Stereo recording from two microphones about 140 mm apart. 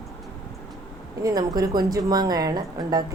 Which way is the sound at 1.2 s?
25° right (ahead or behind).